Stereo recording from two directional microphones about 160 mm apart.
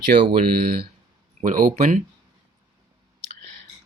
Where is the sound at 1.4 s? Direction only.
55° right (ahead or behind).